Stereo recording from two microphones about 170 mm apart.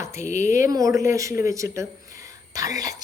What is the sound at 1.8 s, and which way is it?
Whispering, 20° right (ahead or behind).